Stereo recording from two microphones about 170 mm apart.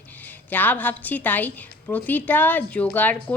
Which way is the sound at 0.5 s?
10° left (ahead or behind).